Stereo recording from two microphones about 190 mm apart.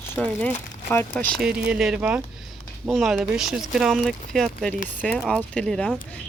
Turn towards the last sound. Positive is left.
turn(degrees=0)  # may be behind; listen again after turning